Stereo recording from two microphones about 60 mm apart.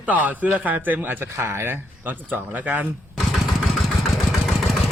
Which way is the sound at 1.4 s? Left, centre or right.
Right.